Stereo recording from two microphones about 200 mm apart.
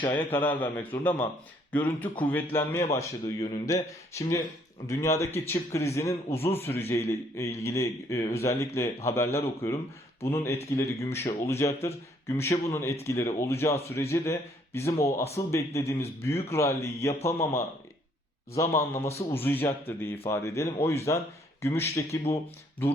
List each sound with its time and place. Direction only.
0.1 s a man's voice: 10° left (ahead or behind)
6.3 s a man's voice: 30° left (ahead or behind)
6.6 s a man's voice: 10° left (ahead or behind)